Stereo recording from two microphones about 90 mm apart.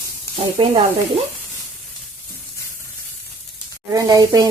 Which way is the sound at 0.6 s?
85° right.